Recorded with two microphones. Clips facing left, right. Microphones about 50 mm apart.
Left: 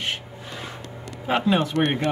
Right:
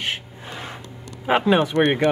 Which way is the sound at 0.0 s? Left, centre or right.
Centre.